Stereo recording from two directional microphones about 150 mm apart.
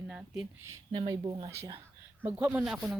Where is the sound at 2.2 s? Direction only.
10° right (ahead or behind).